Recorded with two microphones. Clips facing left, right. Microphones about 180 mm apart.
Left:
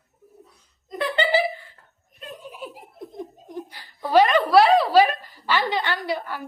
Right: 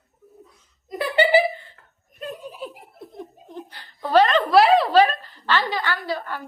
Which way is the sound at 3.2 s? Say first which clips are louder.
Left 2 dB; 10° left (ahead or behind).